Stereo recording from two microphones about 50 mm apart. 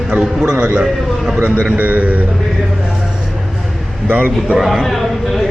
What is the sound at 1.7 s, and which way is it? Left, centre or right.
Speech, right.